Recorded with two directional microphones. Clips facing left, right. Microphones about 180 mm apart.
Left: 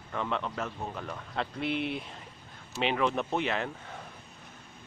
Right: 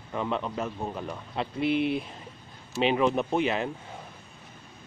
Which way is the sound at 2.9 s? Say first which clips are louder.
Right 3 dB; 10° right (ahead or behind).